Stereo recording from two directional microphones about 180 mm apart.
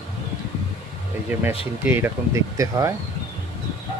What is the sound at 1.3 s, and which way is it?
Speech, 10° right (ahead or behind).